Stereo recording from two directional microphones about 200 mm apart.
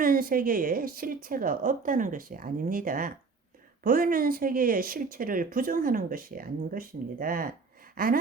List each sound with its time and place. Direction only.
0.0 s speech: 45° right (ahead or behind)